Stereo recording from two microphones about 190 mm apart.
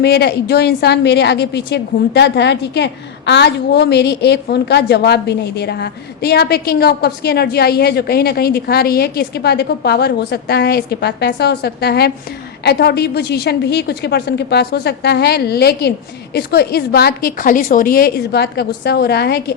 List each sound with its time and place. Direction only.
0.0 s a woman's voice: 60° left (ahead or behind)